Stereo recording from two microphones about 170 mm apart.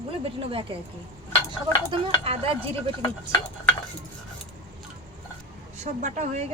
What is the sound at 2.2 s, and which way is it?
Speech, 35° right (ahead or behind).